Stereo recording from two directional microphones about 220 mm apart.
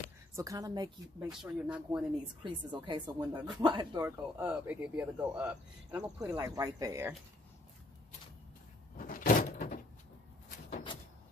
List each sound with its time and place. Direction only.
0.4 s speech: 15° right (ahead or behind)
1.4 s speech: 5° right (ahead or behind)
2.4 s speech: 20° right (ahead or behind)
4.4 s speech: 5° right (ahead or behind)
8.9 s door: 40° left (ahead or behind)